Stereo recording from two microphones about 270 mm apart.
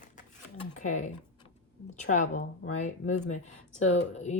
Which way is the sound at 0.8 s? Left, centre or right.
Left.